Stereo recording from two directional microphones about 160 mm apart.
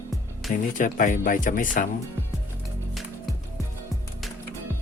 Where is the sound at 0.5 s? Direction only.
55° left (ahead or behind).